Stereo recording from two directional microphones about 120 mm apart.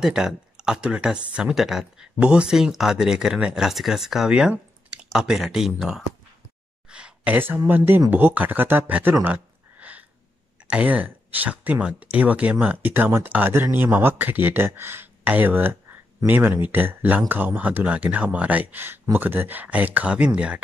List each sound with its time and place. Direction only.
0.0 s speech: 5° right (ahead or behind)
9.2 s a sound: 15° right (ahead or behind)
10.7 s speech: 10° right (ahead or behind)